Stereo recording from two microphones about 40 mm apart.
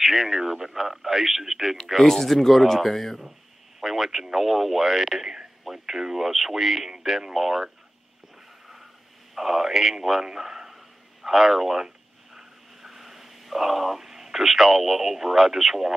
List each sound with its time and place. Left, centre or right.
0.0 s speech: centre
2.0 s speech: centre
3.8 s speech: centre
9.3 s speech: centre
12.4 s a sound: centre